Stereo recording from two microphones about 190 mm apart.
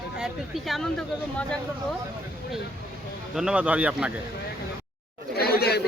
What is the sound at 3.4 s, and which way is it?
Speech, 5° right (ahead or behind).